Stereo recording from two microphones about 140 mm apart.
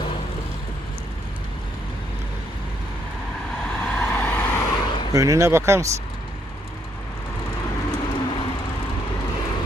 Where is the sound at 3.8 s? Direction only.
15° left (ahead or behind).